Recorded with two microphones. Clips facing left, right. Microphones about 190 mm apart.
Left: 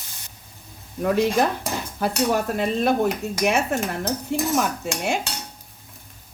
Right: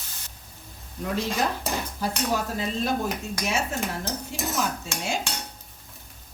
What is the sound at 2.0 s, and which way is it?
Cutlery, 60° left (ahead or behind).